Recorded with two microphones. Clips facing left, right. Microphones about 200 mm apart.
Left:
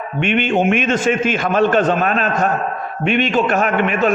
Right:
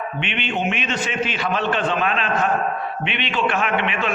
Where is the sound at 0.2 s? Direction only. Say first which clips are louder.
Left 10 dB; 45° left (ahead or behind).